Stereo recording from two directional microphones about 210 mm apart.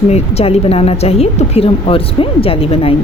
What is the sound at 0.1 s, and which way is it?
A woman's voice, 30° left (ahead or behind).